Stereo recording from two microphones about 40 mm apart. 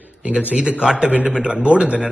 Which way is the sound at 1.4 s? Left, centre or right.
Right.